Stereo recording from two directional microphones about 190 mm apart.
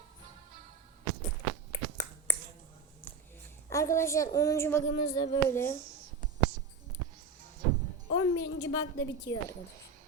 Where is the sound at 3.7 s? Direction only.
15° left (ahead or behind).